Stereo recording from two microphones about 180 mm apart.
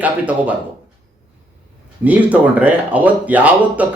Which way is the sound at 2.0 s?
10° right (ahead or behind).